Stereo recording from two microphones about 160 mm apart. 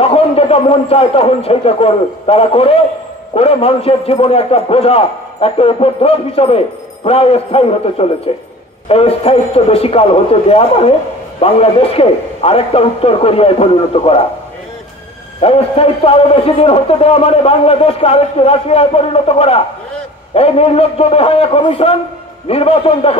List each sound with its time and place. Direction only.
0.0 s a man's voice: 40° left (ahead or behind)
15.4 s a man's voice: 35° left (ahead or behind)